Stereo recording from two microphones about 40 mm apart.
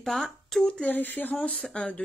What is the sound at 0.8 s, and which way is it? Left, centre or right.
Speech, left.